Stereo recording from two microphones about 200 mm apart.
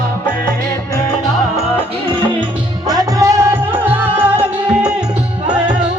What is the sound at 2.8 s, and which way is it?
Music, 20° right (ahead or behind).